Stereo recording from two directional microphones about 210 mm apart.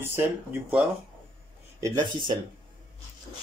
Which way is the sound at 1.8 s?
20° right (ahead or behind).